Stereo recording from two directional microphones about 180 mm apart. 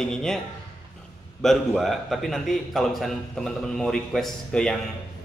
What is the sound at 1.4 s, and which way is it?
A man's voice, centre (ahead or behind).